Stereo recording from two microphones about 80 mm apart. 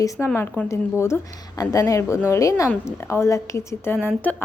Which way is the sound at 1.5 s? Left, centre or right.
Left.